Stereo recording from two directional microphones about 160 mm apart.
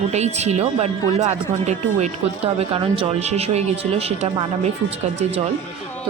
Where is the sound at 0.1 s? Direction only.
45° right (ahead or behind).